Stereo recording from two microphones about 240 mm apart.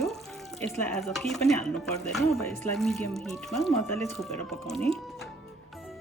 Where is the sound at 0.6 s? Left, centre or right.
Centre.